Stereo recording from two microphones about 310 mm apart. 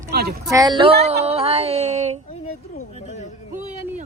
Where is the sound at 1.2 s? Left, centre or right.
Centre.